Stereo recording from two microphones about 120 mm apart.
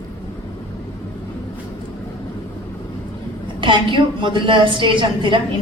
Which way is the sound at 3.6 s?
40° right (ahead or behind).